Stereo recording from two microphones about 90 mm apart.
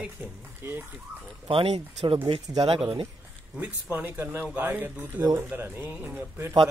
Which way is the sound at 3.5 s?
20° right (ahead or behind).